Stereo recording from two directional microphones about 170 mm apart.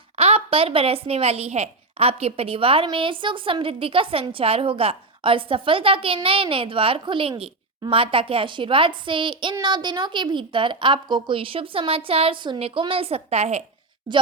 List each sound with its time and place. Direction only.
0.2 s a woman's voice: 35° right (ahead or behind)